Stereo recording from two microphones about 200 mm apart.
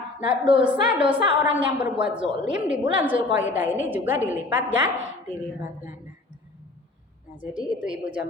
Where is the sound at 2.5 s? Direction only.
5° right (ahead or behind).